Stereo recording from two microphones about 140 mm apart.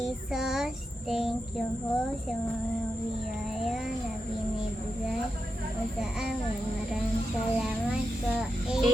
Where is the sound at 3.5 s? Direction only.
Centre (ahead or behind).